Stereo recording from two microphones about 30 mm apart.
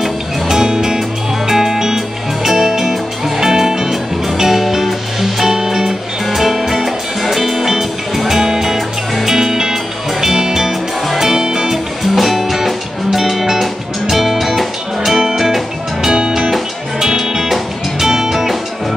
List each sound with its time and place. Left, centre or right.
0.5 s music: centre
6.2 s music: centre
11.7 s music: centre
16.1 s music: right
17.2 s music: centre